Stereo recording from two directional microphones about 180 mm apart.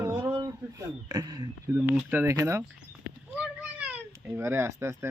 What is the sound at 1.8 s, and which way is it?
A child's voice, 10° right (ahead or behind).